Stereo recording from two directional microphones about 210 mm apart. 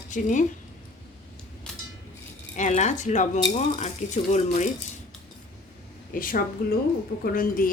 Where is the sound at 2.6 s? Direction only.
35° left (ahead or behind).